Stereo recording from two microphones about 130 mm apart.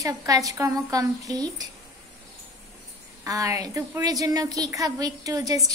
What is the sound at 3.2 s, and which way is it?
Speech, 25° right (ahead or behind).